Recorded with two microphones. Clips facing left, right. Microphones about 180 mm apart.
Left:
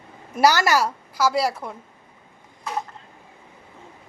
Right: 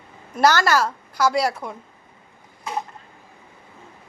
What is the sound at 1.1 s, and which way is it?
Speech, 5° left (ahead or behind).